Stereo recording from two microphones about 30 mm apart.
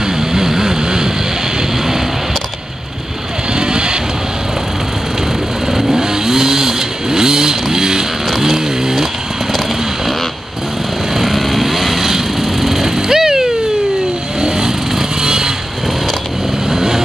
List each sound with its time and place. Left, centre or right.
0.0 s vehicle: centre
3.5 s vehicle: right
5.7 s vehicle: centre
8.4 s chainsaw: centre
11.1 s vehicle: centre; by 15.5 s right
16.6 s vehicle: centre